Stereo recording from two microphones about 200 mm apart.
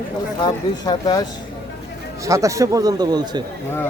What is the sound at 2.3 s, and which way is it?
Speech, 15° right (ahead or behind).